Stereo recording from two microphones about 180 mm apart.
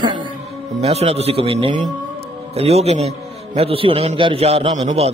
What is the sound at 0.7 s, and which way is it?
A man's voice, 35° right (ahead or behind).